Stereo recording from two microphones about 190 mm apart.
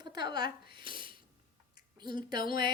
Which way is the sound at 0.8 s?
25° right (ahead or behind).